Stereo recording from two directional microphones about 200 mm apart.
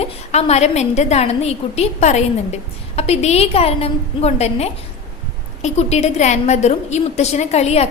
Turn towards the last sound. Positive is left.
turn(degrees=30)  # may be behind; listen again after turning